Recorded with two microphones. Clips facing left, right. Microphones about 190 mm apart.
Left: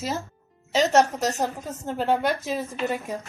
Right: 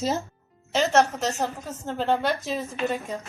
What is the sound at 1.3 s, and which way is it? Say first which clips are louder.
A woman's voice: left 1 dB; 15° left (ahead or behind).